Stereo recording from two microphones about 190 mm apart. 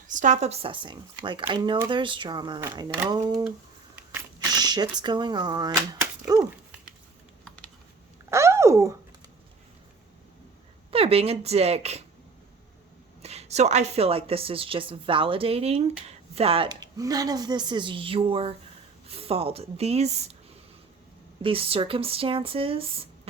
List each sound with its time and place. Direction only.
0.1 s a woman's voice: 40° right (ahead or behind); by 3.5 s 20° right (ahead or behind)
4.6 s a woman's voice: 20° right (ahead or behind)
7.4 s computer keyboard: 5° left (ahead or behind)
8.3 s a sound: 15° right (ahead or behind)
10.9 s a woman's voice: 30° right (ahead or behind)
13.2 s a woman's voice: 35° right (ahead or behind)
21.4 s a woman's voice: 30° right (ahead or behind)